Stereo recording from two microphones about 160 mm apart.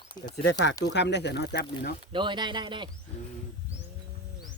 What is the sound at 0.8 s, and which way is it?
Speech, 90° left.